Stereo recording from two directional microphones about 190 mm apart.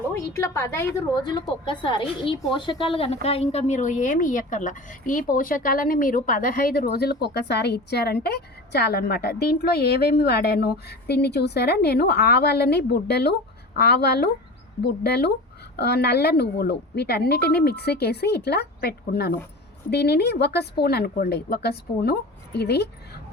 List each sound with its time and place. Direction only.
0.1 s a woman's voice: 15° left (ahead or behind); by 23.2 s 60° left (ahead or behind)